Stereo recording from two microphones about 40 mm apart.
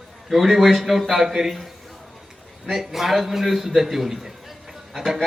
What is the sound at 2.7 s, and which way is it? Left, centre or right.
A man's voice, centre.